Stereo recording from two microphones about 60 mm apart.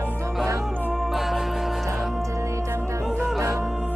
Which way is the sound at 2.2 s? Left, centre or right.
Right.